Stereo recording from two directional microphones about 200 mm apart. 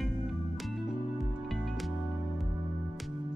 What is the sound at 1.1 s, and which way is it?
Music, centre (ahead or behind).